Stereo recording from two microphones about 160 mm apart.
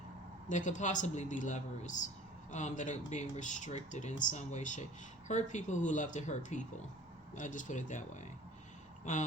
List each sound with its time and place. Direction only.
0.4 s speech: 50° left (ahead or behind)